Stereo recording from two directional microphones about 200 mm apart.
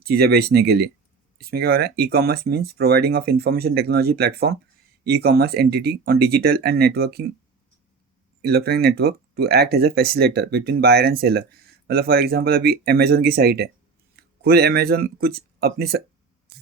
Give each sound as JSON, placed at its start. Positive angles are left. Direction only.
{"t": 0.0, "sound": "speech", "side_deg": -50}
{"t": 8.4, "sound": "speech", "side_deg": -55}